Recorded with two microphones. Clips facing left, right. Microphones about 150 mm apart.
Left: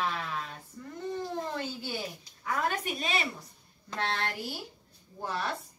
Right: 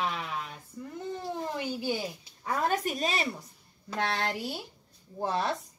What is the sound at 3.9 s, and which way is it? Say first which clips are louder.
Speech: right 2 dB; 15° right (ahead or behind).